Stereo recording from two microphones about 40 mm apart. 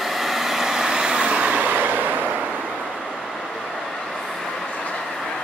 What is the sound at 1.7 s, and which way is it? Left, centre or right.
Train, right.